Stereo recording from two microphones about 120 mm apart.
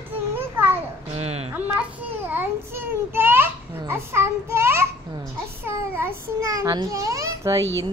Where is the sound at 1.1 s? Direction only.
60° right (ahead or behind).